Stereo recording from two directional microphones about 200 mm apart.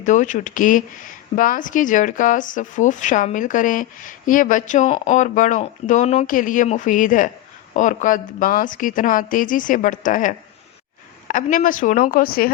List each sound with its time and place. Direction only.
0.0 s speech: 40° left (ahead or behind)